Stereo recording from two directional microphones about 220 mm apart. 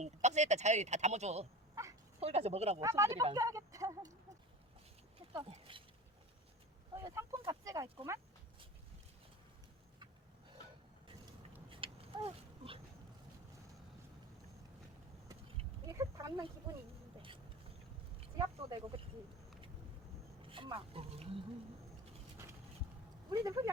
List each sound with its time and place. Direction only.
0.0 s speech: 30° right (ahead or behind)
1.8 s bow-wow: 15° right (ahead or behind)
2.2 s speech: 30° right (ahead or behind)
2.8 s speech: 15° right (ahead or behind)
5.3 s speech: 25° right (ahead or behind)
6.9 s speech: 15° right (ahead or behind)
11.7 s a sound: 25° right (ahead or behind)
15.9 s speech: 15° right (ahead or behind)
18.2 s speech: 20° right (ahead or behind)
20.4 s speech: 25° right (ahead or behind)
23.3 s speech: 15° right (ahead or behind)